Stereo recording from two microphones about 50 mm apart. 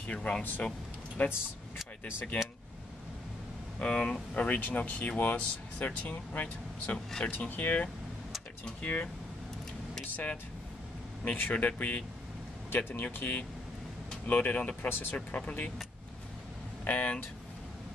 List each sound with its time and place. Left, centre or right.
0.0 s speech: left
0.4 s speech: left
3.8 s speech: left
4.5 s speech: left
10.1 s speech: left
11.5 s speech: left
14.9 s speech: left
15.1 s speech: left
16.8 s speech: left